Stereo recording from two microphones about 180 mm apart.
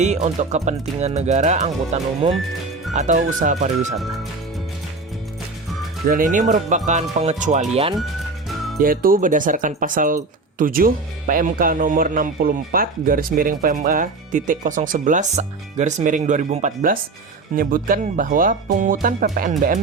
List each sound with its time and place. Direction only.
0.0 s speech: 40° right (ahead or behind)
2.3 s speech: centre (ahead or behind)
2.9 s speech: 40° right (ahead or behind)
6.1 s speech: 50° right (ahead or behind)